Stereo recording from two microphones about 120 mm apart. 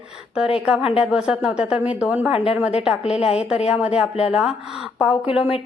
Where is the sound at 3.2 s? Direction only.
55° left (ahead or behind).